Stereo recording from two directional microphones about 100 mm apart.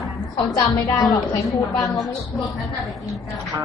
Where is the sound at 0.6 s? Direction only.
40° left (ahead or behind).